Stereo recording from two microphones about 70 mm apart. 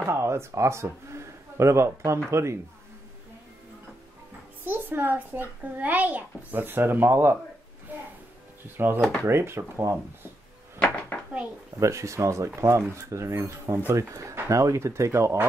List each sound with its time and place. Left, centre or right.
0.0 s a man's voice: right
4.6 s a child's voice: right
8.7 s speech: right
10.8 s dishes: left
11.8 s speech: right